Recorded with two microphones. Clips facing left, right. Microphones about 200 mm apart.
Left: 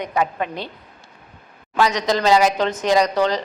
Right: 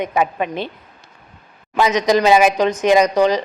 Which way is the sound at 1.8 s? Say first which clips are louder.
Right 4 dB; 20° right (ahead or behind).